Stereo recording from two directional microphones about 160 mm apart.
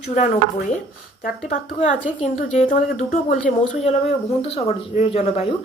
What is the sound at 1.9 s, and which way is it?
A woman's voice, 50° left (ahead or behind).